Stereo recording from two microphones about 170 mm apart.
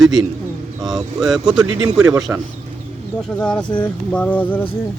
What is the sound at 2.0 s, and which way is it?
Speech, 15° right (ahead or behind).